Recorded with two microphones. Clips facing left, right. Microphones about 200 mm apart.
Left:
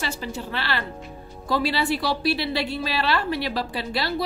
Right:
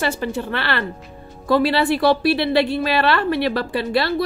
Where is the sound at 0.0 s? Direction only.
55° right (ahead or behind).